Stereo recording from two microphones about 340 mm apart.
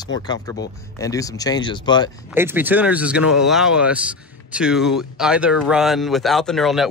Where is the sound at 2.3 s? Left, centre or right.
Centre.